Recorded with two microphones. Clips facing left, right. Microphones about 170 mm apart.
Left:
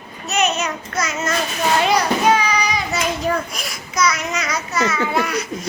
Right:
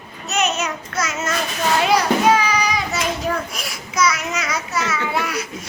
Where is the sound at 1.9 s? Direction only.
Centre (ahead or behind).